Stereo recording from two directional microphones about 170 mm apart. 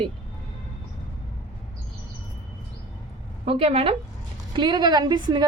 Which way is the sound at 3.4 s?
35° right (ahead or behind).